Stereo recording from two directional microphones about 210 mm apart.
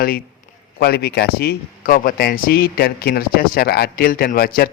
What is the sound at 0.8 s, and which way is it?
A man's voice, 50° left (ahead or behind).